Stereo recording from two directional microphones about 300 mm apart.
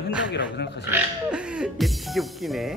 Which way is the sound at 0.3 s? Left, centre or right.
Left.